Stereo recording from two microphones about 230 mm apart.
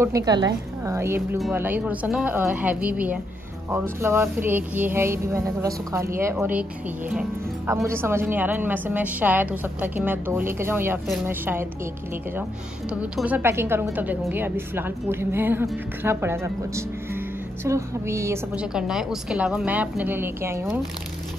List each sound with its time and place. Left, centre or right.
0.0 s a woman's voice: centre
12.9 s a woman's voice: centre